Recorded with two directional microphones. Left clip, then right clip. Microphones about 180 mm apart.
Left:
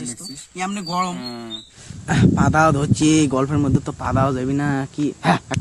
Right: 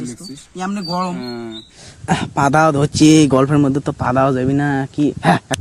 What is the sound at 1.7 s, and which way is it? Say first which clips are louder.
Speech: right 4 dB; 30° right (ahead or behind).